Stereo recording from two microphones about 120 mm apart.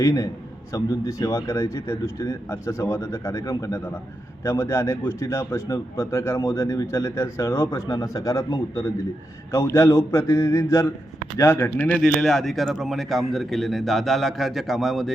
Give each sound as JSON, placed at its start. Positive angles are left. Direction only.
{"t": 0.0, "sound": "a man's voice", "side_deg": 30}
{"t": 11.9, "sound": "speech", "side_deg": 5}